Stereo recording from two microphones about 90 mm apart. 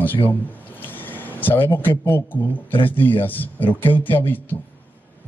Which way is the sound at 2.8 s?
20° left (ahead or behind).